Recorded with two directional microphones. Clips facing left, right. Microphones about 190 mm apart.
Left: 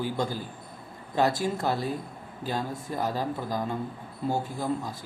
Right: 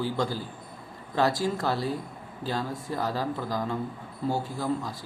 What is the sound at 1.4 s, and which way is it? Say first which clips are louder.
Speech: even; 20° left (ahead or behind).